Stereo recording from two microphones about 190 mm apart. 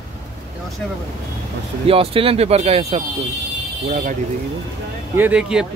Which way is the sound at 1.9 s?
30° right (ahead or behind).